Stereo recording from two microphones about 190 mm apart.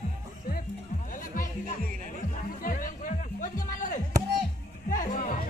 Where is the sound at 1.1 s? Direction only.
45° left (ahead or behind).